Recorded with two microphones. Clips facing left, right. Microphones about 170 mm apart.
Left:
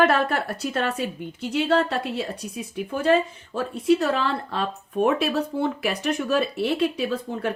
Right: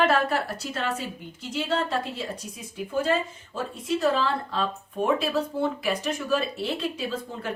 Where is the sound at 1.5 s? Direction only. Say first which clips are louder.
Left 5 dB; 65° left (ahead or behind).